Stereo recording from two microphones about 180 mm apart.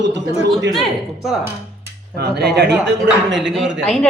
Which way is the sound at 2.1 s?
65° right (ahead or behind).